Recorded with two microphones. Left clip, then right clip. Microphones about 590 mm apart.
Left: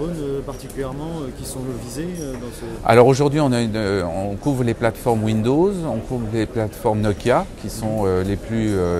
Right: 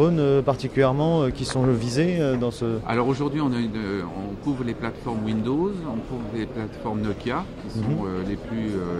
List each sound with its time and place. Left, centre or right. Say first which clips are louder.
0.0 s speech: right 6 dB; right
2.9 s a man's voice: left 13 dB; left